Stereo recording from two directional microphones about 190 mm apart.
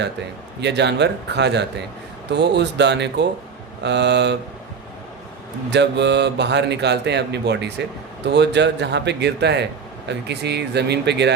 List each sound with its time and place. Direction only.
0.6 s speech: 65° right (ahead or behind)
5.7 s speech: 65° right (ahead or behind)